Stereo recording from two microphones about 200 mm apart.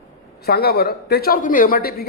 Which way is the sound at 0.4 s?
55° left (ahead or behind).